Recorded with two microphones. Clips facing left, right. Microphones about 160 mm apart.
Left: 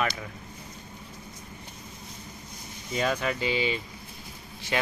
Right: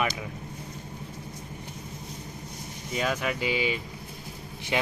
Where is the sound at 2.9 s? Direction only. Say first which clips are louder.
Left 1 dB; 5° right (ahead or behind).